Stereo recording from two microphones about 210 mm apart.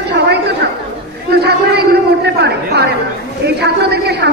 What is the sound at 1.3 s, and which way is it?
A woman's voice, 50° right (ahead or behind).